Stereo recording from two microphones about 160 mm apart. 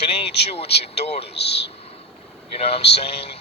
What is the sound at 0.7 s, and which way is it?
Speech, 40° left (ahead or behind).